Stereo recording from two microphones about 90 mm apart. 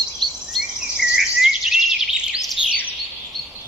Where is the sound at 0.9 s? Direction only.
5° right (ahead or behind).